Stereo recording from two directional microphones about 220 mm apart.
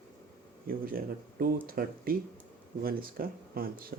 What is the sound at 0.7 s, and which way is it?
Speech, 40° right (ahead or behind).